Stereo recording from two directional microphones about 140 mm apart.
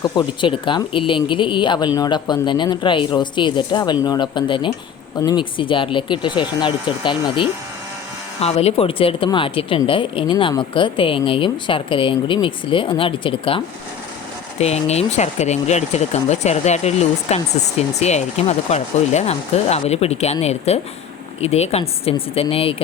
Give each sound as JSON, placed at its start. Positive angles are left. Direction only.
{"t": 0.0, "sound": "speech", "side_deg": 30}
{"t": 8.4, "sound": "speech", "side_deg": 45}
{"t": 14.6, "sound": "speech", "side_deg": 50}